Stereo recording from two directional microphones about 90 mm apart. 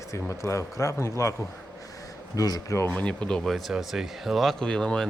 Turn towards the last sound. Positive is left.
turn(degrees=10)  # may be behind; listen again after turning